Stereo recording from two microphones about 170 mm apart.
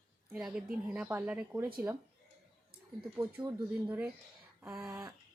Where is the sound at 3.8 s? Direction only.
10° right (ahead or behind).